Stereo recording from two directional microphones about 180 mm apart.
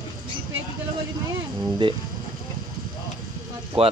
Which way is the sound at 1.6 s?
25° right (ahead or behind).